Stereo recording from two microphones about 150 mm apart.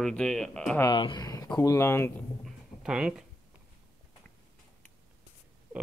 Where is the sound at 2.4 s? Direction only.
5° right (ahead or behind).